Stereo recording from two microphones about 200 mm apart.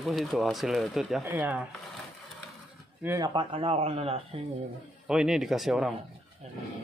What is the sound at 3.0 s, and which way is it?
A man's voice, 15° right (ahead or behind).